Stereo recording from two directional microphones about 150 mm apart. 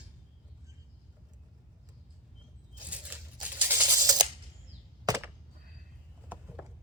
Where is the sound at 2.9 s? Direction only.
10° right (ahead or behind).